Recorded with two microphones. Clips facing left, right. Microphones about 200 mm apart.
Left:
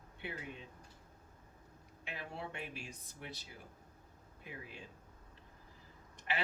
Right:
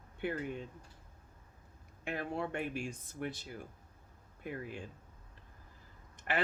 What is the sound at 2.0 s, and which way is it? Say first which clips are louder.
Speech: right 8 dB; 50° right (ahead or behind).